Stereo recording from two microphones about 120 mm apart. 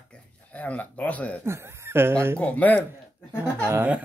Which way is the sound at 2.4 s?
10° left (ahead or behind).